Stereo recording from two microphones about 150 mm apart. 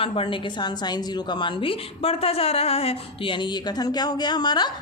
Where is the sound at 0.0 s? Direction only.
40° left (ahead or behind).